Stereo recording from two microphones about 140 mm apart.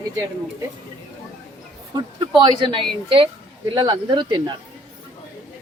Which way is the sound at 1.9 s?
35° right (ahead or behind).